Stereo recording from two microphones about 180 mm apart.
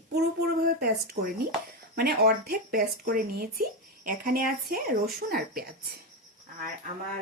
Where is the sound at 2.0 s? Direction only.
60° right (ahead or behind).